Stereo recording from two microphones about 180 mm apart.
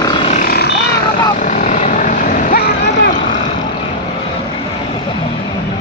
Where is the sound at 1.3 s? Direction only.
45° left (ahead or behind); by 3.1 s 65° left (ahead or behind).